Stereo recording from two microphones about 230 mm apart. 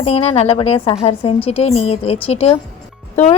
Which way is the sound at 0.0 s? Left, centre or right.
Left.